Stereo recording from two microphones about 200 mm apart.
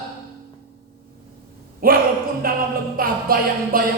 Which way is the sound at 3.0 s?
45° right (ahead or behind).